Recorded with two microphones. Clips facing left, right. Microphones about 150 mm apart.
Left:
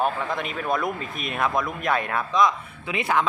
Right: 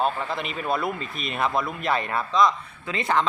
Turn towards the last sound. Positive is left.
turn(degrees=10)  # may be behind; listen again after turning